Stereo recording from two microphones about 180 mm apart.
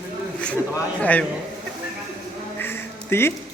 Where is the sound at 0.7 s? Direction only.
10° left (ahead or behind).